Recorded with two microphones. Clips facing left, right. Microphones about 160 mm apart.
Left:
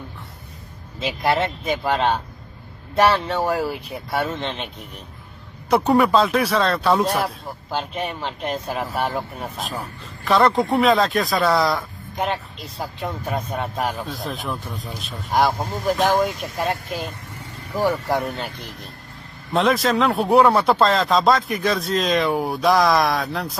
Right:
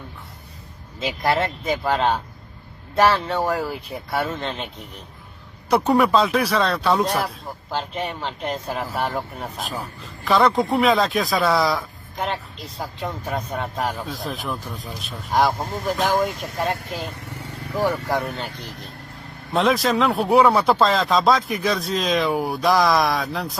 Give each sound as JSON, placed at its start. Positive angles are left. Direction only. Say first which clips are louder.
{"t": 1.7, "sound": "speech", "louder": "even", "side_deg": 0}
{"t": 3.3, "sound": "speech", "louder": "left 1 dB", "side_deg": 0}
{"t": 5.7, "sound": "speech", "louder": "left 1 dB", "side_deg": 0}
{"t": 19.5, "sound": "speech", "louder": "left 1 dB", "side_deg": 0}